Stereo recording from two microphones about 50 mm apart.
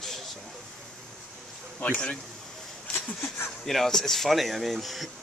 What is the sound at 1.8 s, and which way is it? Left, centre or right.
Speech, left.